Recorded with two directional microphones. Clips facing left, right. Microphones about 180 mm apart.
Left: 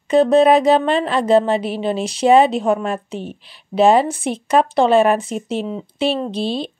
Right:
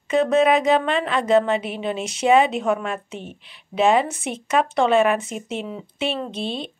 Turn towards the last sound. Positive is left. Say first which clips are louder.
# left 6 dB
turn(degrees=35)  # may be behind; listen again after turning